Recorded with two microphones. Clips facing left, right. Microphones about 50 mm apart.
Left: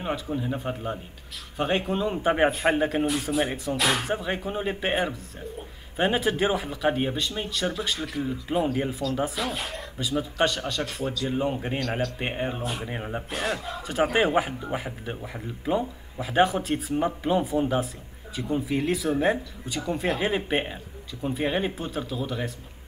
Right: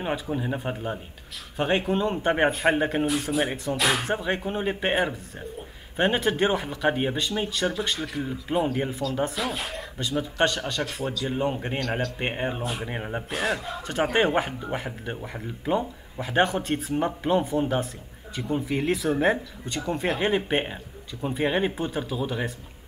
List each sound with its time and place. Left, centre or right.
0.0 s speech: centre
1.6 s a man's voice: centre